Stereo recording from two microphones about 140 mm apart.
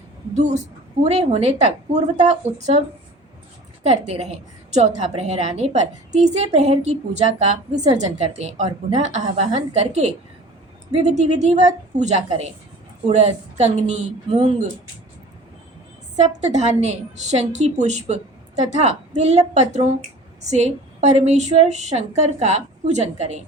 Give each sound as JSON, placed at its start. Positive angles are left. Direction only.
{"t": 0.3, "sound": "a woman's voice", "side_deg": -55}
{"t": 3.8, "sound": "a woman's voice", "side_deg": -50}
{"t": 11.2, "sound": "a woman's voice", "side_deg": -55}
{"t": 16.1, "sound": "a woman's voice", "side_deg": -55}